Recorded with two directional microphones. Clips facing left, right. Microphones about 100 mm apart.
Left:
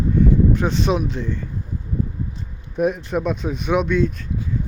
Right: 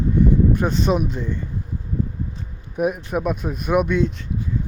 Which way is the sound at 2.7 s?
10° right (ahead or behind).